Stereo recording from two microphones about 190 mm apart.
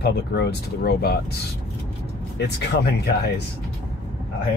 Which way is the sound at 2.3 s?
60° left (ahead or behind).